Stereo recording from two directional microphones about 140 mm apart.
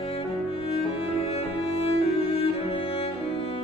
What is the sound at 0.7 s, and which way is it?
Music, 45° left (ahead or behind).